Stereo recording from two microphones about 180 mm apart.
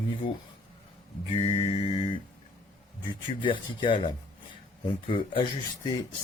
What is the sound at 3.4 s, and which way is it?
Speech, 25° left (ahead or behind).